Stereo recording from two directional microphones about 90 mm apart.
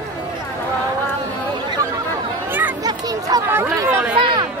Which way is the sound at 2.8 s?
45° right (ahead or behind).